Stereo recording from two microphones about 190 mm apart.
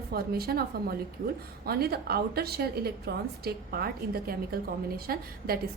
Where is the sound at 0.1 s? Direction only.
55° right (ahead or behind).